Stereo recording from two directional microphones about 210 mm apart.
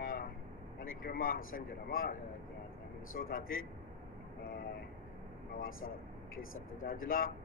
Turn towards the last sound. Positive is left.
turn(degrees=40)  # may be behind; listen again after turning